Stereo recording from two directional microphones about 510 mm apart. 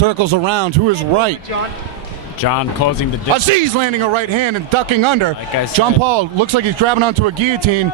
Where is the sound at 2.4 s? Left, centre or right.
Left.